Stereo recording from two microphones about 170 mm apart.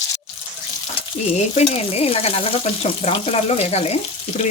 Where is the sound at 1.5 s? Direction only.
40° left (ahead or behind).